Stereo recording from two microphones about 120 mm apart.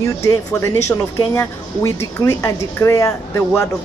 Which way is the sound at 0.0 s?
25° left (ahead or behind).